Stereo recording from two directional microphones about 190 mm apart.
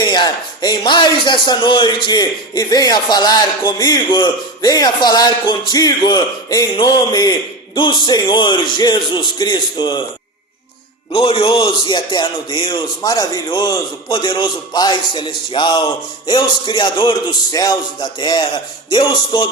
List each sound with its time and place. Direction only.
0.1 s a man's voice: 20° left (ahead or behind)
11.1 s a man's voice: 30° left (ahead or behind)